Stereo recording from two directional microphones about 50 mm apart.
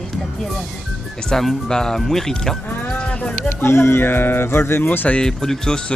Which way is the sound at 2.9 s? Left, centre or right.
Left.